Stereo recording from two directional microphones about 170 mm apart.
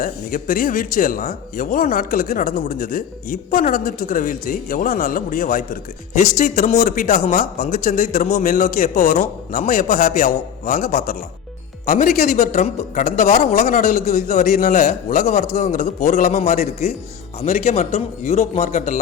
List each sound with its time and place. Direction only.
0.0 s speech: 55° left (ahead or behind)
13.3 s speech: 50° left (ahead or behind)
17.4 s a man's voice: 40° left (ahead or behind)